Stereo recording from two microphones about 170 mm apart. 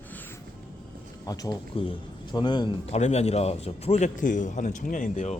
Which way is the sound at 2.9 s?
40° left (ahead or behind).